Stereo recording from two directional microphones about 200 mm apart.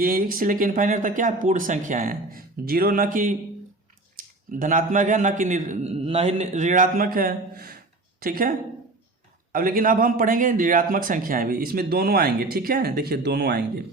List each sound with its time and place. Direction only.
0.0 s a man's voice: 45° right (ahead or behind)
4.5 s a man's voice: 40° right (ahead or behind)